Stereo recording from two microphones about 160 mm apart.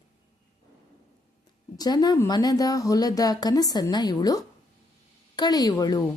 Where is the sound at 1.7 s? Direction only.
25° left (ahead or behind).